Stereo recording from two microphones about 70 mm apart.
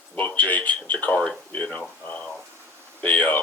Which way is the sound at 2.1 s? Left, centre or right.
Centre.